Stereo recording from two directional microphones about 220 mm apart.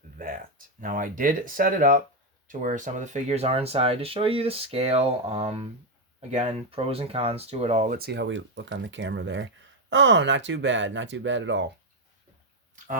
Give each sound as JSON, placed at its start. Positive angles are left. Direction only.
{"t": 0.8, "sound": "speech", "side_deg": -40}